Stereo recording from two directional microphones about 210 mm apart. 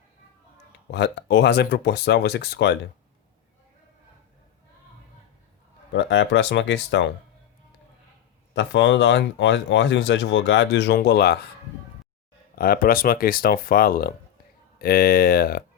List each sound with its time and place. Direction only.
0.9 s speech: 55° left (ahead or behind)
5.9 s speech: 60° left (ahead or behind)
8.5 s speech: 60° left (ahead or behind)
12.5 s speech: 45° left (ahead or behind)